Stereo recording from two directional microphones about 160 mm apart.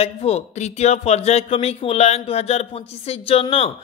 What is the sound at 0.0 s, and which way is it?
Speech, 40° left (ahead or behind).